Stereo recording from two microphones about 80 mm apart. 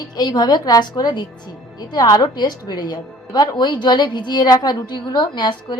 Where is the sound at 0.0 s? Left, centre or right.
Left.